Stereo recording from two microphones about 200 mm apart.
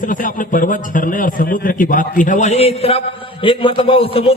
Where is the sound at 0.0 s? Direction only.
40° left (ahead or behind).